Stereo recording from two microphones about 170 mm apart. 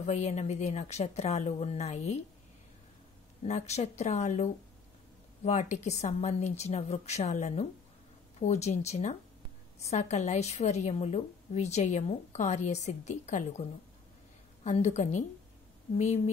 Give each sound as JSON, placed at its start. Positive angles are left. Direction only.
{"t": 0.0, "sound": "a woman's voice", "side_deg": 45}
{"t": 3.4, "sound": "a woman's voice", "side_deg": 40}